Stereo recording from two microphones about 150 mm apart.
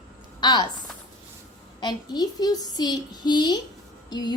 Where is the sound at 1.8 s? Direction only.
30° left (ahead or behind).